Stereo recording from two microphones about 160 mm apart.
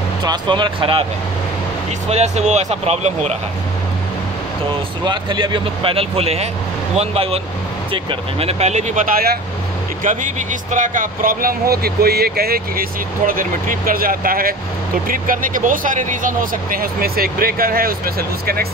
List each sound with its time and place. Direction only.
0.2 s speech: 25° right (ahead or behind)
2.0 s speech: 45° right (ahead or behind)
5.0 s speech: 30° right (ahead or behind); by 9.0 s 45° right (ahead or behind)
9.1 s speech: 75° right (ahead or behind)
10.0 s speech: 50° right (ahead or behind); by 18.7 s 70° right (ahead or behind)